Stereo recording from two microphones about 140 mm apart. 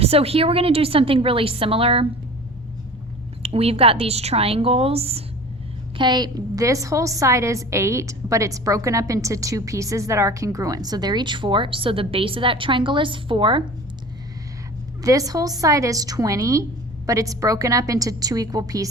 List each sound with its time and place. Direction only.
0.0 s a woman's voice: 45° right (ahead or behind)
3.4 s a woman's voice: 45° right (ahead or behind)
6.0 s a woman's voice: 30° right (ahead or behind)
15.0 s a woman's voice: 25° right (ahead or behind)